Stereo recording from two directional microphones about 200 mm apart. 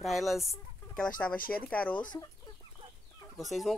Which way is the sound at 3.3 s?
Centre (ahead or behind).